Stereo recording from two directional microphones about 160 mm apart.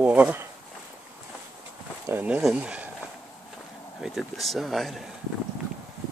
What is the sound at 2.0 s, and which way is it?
Speech, 10° right (ahead or behind).